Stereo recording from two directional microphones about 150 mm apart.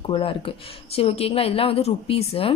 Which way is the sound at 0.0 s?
35° left (ahead or behind).